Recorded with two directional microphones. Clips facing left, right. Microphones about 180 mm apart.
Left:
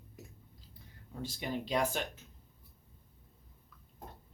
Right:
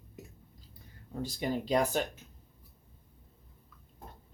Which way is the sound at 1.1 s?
40° right (ahead or behind).